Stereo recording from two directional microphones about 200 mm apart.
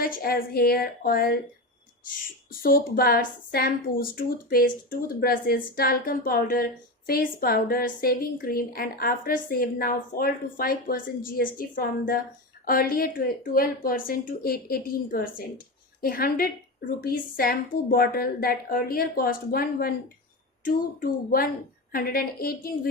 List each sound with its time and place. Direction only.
0.0 s a woman's voice: 45° left (ahead or behind)